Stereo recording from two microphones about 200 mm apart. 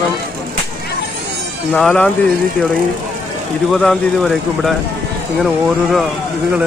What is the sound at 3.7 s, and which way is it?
Speech, centre (ahead or behind).